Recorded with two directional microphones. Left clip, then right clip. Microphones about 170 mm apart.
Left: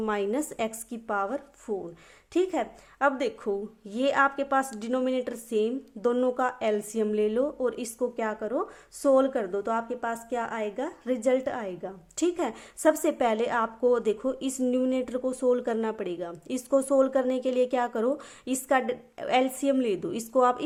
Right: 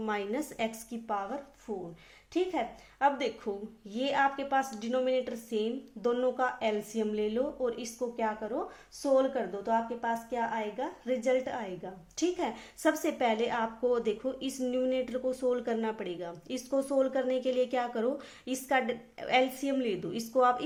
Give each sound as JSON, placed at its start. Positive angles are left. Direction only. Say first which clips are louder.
{"t": 0.0, "sound": "a woman's voice", "louder": "left 5 dB", "side_deg": 40}